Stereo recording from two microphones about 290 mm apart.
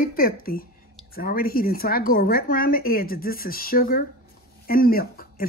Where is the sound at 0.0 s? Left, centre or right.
Left.